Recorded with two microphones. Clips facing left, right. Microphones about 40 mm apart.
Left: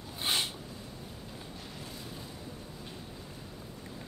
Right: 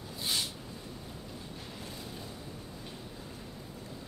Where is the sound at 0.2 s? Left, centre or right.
Left.